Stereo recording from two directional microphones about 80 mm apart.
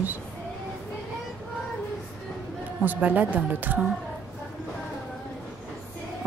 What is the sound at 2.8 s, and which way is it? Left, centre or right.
Speech, right.